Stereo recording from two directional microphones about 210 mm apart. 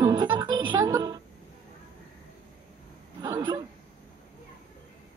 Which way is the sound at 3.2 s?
20° right (ahead or behind).